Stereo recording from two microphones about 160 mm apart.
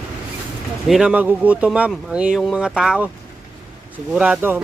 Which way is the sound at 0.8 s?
5° right (ahead or behind).